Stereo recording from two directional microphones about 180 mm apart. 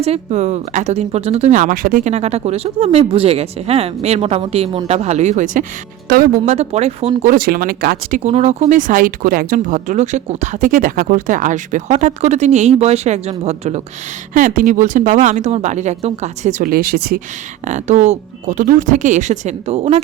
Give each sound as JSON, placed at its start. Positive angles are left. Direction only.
{"t": 0.0, "sound": "speech", "side_deg": -35}
{"t": 6.1, "sound": "speech", "side_deg": -55}
{"t": 6.5, "sound": "speech", "side_deg": -35}
{"t": 7.2, "sound": "speech", "side_deg": -50}
{"t": 8.2, "sound": "speech", "side_deg": -35}
{"t": 14.3, "sound": "speech", "side_deg": -50}
{"t": 17.7, "sound": "speech", "side_deg": -40}